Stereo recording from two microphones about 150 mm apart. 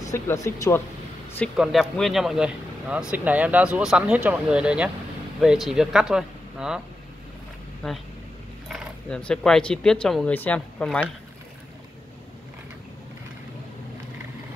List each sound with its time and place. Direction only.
0.1 s speech: 20° left (ahead or behind)
1.6 s speech: centre (ahead or behind)
7.8 s speech: 5° left (ahead or behind)